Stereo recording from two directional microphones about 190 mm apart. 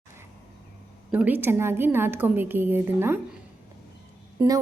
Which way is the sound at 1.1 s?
10° right (ahead or behind).